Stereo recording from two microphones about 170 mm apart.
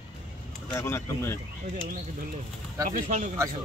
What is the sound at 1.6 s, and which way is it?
Speech, 45° right (ahead or behind).